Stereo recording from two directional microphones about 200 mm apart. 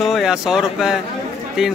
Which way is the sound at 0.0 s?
Centre (ahead or behind).